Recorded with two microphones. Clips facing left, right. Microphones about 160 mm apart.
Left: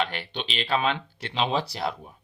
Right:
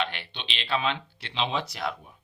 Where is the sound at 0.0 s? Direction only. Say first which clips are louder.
Left 3 dB; 40° left (ahead or behind).